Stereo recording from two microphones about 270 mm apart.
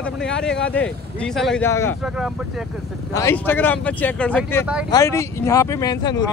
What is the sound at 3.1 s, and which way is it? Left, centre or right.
Speech, centre.